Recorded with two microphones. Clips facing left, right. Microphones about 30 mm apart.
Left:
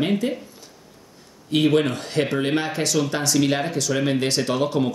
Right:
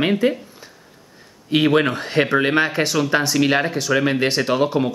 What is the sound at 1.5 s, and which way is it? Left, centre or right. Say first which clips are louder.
Speech: right 2 dB; right.